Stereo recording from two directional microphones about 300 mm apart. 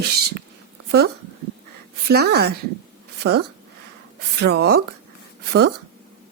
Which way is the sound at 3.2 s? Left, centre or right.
Right.